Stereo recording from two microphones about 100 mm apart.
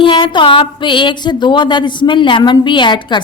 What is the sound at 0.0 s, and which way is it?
Speech, 55° left (ahead or behind).